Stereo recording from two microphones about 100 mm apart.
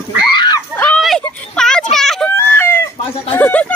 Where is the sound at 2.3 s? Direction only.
20° left (ahead or behind).